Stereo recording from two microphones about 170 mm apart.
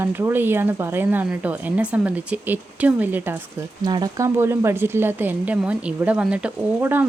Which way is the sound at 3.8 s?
25° right (ahead or behind).